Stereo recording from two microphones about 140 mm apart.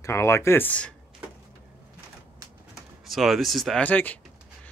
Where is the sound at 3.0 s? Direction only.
Centre (ahead or behind).